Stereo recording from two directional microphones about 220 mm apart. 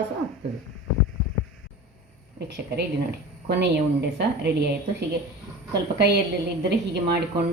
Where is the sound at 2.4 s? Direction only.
50° right (ahead or behind).